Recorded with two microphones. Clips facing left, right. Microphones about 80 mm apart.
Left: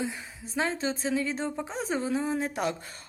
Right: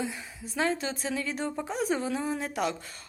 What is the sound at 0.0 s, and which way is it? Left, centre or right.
Speech, left.